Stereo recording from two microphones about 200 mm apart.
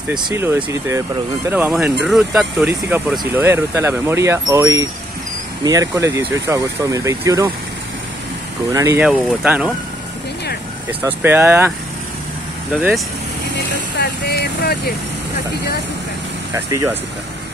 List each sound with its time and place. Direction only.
0.2 s speech: 15° right (ahead or behind)
8.7 s speech: 15° right (ahead or behind)
11.2 s speech: 10° right (ahead or behind)
12.7 s speech: centre (ahead or behind)
13.9 s speech: 50° left (ahead or behind)
16.5 s speech: 10° right (ahead or behind)